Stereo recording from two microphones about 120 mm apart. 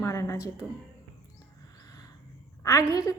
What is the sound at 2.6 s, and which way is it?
Speech, 30° left (ahead or behind).